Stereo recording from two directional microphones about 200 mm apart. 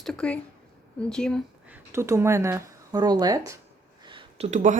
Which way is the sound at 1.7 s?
15° right (ahead or behind).